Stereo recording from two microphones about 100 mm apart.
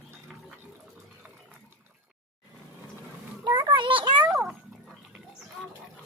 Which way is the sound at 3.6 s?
55° right (ahead or behind).